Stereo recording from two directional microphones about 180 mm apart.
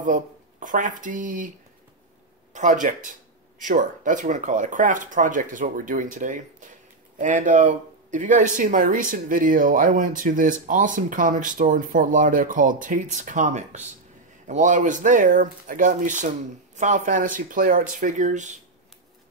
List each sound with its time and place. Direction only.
0.0 s speech: 45° right (ahead or behind)
2.5 s speech: 45° right (ahead or behind)